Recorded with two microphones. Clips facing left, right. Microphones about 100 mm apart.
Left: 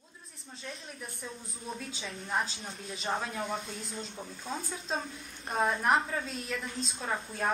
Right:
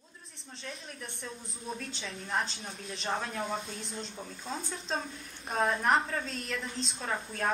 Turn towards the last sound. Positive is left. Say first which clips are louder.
# even
turn(degrees=5)  # may be behind; listen again after turning